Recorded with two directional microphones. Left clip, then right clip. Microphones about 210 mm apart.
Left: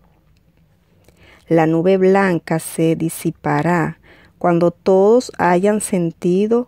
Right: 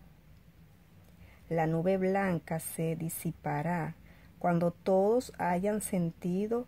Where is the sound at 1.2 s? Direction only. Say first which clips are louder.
Left 17 dB; 45° left (ahead or behind).